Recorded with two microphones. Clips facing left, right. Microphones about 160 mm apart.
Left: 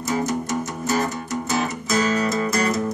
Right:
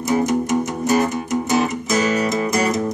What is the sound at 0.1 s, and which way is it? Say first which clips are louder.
Music: right 6 dB; 15° right (ahead or behind).